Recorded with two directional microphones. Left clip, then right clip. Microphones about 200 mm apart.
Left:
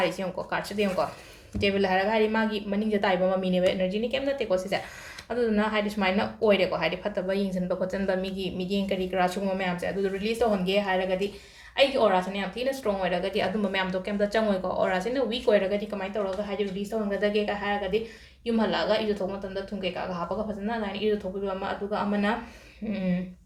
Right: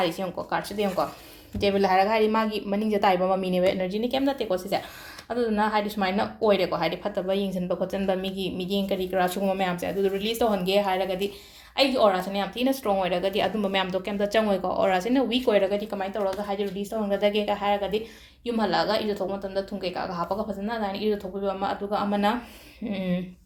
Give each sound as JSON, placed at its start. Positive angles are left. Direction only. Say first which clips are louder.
{"t": 0.0, "sound": "speech", "louder": "right 1 dB", "side_deg": -20}
{"t": 17.1, "sound": "speech", "louder": "right 3 dB", "side_deg": -40}